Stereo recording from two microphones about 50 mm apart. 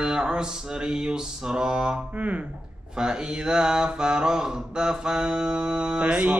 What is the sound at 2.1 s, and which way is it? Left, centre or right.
Mantra, right.